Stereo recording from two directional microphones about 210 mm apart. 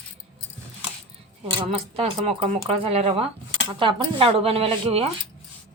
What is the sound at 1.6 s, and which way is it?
Speech, 25° right (ahead or behind).